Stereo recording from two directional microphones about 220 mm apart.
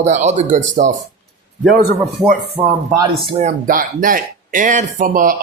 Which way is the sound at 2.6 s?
15° right (ahead or behind).